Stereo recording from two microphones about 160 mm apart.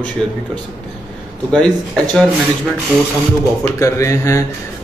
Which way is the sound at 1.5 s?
5° left (ahead or behind).